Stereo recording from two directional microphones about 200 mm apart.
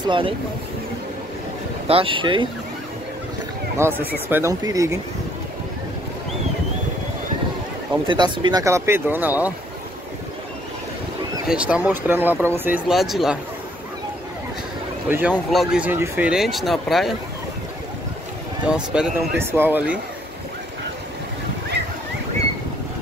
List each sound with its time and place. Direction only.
0.0 s speech: 25° right (ahead or behind)
1.9 s speech: 25° right (ahead or behind)
3.7 s speech: 10° right (ahead or behind)
8.1 s speech: 20° right (ahead or behind)
11.4 s speech: 5° right (ahead or behind)
15.0 s speech: 10° right (ahead or behind)
18.7 s speech: 10° right (ahead or behind)